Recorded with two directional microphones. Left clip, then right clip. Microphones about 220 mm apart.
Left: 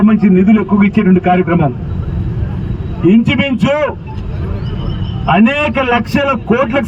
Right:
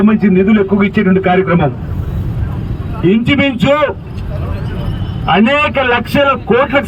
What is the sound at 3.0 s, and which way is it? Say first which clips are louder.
Speech: even; 50° right (ahead or behind).